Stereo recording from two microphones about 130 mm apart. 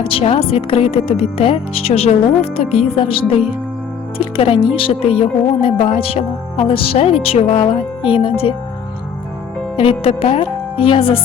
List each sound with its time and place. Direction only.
0.0 s speech: 45° left (ahead or behind)
9.7 s speech: 45° left (ahead or behind)